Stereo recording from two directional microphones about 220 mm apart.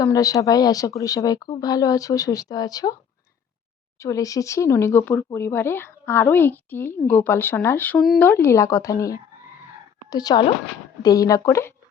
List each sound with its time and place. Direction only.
0.0 s speech: 15° left (ahead or behind)
3.9 s speech: 15° left (ahead or behind)